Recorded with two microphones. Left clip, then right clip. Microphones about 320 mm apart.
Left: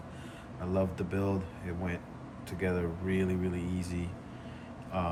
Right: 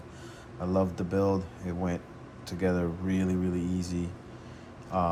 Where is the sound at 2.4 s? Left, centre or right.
Centre.